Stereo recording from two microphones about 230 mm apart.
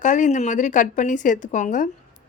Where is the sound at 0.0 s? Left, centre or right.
Left.